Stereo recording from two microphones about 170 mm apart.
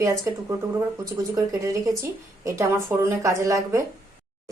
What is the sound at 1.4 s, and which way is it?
A woman's voice, 20° right (ahead or behind).